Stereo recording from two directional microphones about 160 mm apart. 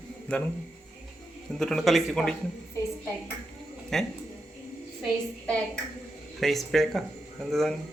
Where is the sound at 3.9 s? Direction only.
5° left (ahead or behind).